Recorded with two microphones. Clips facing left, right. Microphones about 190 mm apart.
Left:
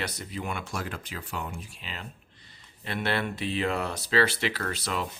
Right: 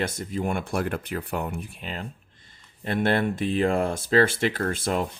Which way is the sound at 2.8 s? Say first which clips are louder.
Right 6 dB; 45° right (ahead or behind).